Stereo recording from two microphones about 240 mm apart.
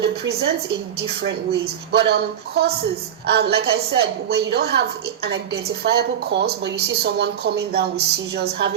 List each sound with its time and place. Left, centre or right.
0.0 s a woman's voice: right